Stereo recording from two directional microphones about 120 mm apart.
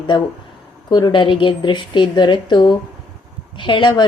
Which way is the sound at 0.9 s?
40° left (ahead or behind).